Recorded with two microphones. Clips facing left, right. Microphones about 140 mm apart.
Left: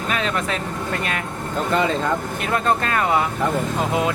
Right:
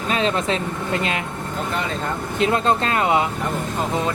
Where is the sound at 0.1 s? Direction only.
25° right (ahead or behind).